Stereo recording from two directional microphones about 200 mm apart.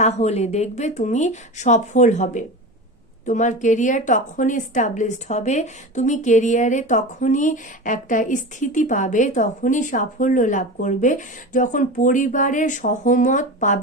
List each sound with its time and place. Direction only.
0.0 s a woman's voice: 35° left (ahead or behind)